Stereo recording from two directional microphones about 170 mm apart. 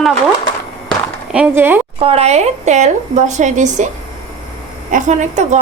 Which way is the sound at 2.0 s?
35° right (ahead or behind).